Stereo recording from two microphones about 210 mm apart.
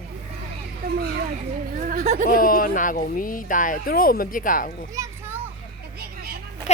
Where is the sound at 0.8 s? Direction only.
45° right (ahead or behind).